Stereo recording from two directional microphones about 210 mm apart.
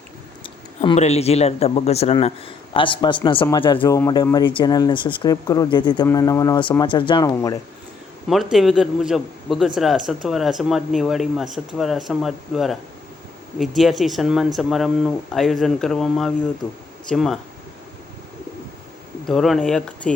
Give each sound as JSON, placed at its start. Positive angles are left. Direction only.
{"t": 0.8, "sound": "a man's voice", "side_deg": 30}
{"t": 8.3, "sound": "speech", "side_deg": 0}
{"t": 19.2, "sound": "speech", "side_deg": 0}